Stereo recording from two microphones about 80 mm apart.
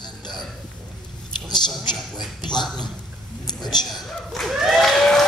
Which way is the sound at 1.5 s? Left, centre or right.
Left.